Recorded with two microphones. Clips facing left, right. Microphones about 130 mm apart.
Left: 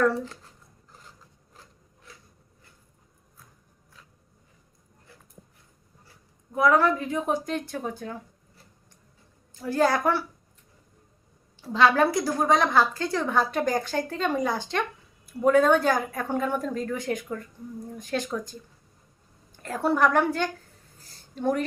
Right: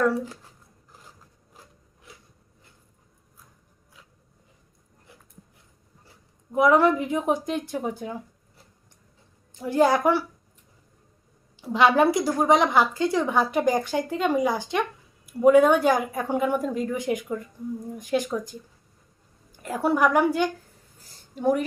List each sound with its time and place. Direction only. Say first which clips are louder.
0.0 s a woman's voice: even; 10° right (ahead or behind)
2.1 s a sound: right 1 dB; 15° right (ahead or behind)
6.1 s a woman's voice: right 6 dB; 20° right (ahead or behind)
9.6 s a woman's voice: right 3 dB; 20° right (ahead or behind)
11.6 s a woman's voice: right 2 dB; 15° right (ahead or behind)
19.6 s a woman's voice: right 1 dB; 10° right (ahead or behind)